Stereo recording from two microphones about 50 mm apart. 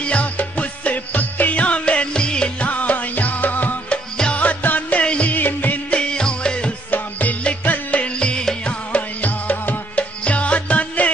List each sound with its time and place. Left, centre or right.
0.0 s music: left
2.7 s music: left
3.9 s music: left
5.3 s music: left
5.9 s music: centre
6.9 s music: left